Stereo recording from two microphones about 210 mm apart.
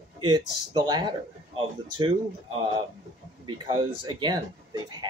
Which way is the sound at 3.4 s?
20° right (ahead or behind).